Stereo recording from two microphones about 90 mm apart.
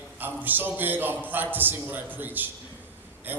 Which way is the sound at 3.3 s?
20° right (ahead or behind).